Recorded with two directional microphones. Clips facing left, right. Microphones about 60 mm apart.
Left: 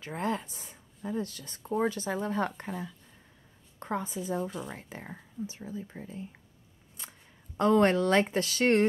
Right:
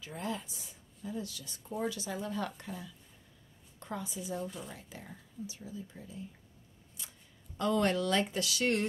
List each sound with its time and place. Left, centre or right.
0.0 s speech: left